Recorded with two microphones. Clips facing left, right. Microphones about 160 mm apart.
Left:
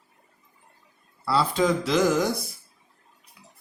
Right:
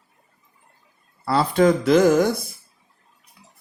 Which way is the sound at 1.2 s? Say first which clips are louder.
Right 5 dB; 50° right (ahead or behind).